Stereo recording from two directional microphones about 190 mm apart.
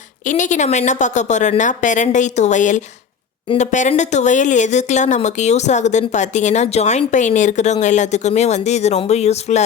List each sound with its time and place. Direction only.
0.3 s speech: 40° left (ahead or behind)